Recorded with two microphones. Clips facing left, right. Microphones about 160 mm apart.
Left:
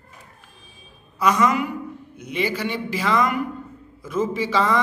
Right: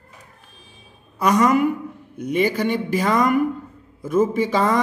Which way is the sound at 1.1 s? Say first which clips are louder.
Right 3 dB; 50° right (ahead or behind).